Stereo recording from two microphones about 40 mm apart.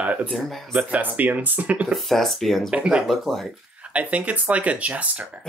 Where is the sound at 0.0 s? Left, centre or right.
Right.